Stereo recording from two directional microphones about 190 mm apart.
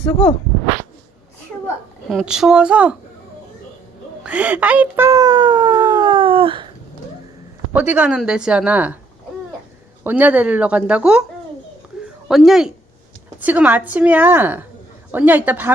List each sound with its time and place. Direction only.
2.0 s speech: centre (ahead or behind)
4.2 s speech: 5° right (ahead or behind); by 6.7 s 25° right (ahead or behind)
7.7 s a woman's voice: 10° right (ahead or behind)
10.0 s a woman's voice: 10° right (ahead or behind)
12.3 s a woman's voice: centre (ahead or behind)